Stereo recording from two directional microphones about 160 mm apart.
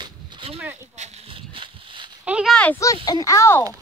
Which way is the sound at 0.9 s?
45° right (ahead or behind).